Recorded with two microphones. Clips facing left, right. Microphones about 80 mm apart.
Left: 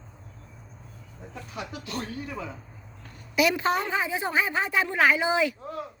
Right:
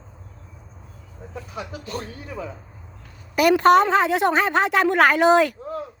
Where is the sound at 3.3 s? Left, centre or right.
Right.